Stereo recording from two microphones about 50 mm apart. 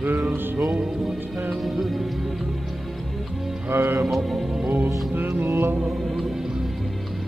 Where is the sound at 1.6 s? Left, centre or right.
Centre.